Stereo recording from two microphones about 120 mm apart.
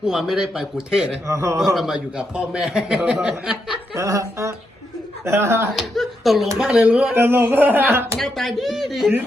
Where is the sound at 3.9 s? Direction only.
25° right (ahead or behind).